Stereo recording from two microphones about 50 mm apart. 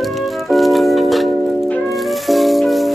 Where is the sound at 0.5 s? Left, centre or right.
Centre.